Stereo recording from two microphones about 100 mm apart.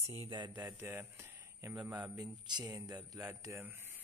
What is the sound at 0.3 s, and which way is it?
Speech, 50° right (ahead or behind).